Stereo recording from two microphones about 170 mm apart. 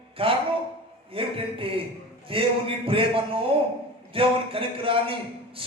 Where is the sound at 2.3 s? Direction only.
35° right (ahead or behind).